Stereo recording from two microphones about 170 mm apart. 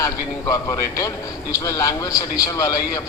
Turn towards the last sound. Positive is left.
turn(degrees=20)  # may be behind; listen again after turning